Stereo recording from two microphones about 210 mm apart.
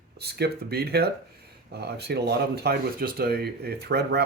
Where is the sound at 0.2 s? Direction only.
50° right (ahead or behind).